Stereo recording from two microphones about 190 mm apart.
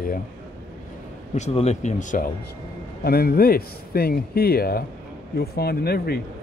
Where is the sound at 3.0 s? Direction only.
55° left (ahead or behind).